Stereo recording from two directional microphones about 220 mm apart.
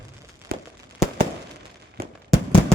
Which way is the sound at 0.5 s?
45° right (ahead or behind).